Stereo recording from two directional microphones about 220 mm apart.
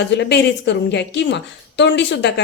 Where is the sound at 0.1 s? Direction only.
50° left (ahead or behind).